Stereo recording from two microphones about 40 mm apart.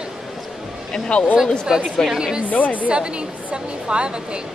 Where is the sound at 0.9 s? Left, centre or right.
Left.